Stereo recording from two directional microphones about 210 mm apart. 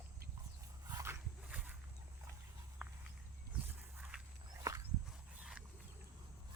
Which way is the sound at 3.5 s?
5° right (ahead or behind).